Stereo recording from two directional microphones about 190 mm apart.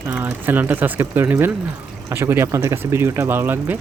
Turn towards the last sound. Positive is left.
turn(degrees=-10)  # may be behind; listen again after turning